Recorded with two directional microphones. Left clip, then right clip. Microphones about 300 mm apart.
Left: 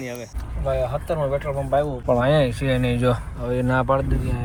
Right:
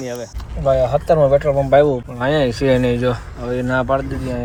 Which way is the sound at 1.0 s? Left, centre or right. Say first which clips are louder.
Right 11 dB; right.